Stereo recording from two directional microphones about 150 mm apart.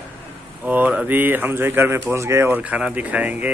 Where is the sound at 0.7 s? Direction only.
10° right (ahead or behind).